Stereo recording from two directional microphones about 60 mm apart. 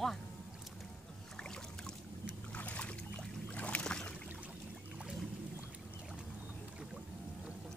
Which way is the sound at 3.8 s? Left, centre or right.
Centre.